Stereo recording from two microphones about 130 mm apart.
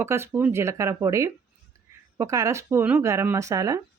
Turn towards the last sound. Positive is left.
turn(degrees=-25)  # may be behind; listen again after turning